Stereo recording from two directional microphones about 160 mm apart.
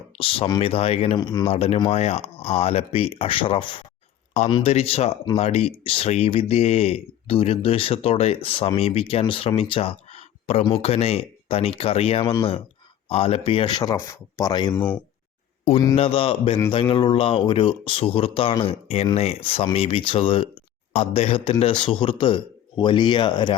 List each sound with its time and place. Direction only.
0.2 s speech: 35° left (ahead or behind)
1.2 s speech: 25° left (ahead or behind)
1.5 s speech: 40° left (ahead or behind)
12.2 s speech: 30° left (ahead or behind)
14.8 s speech: 10° left (ahead or behind)
16.0 s speech: 35° left (ahead or behind)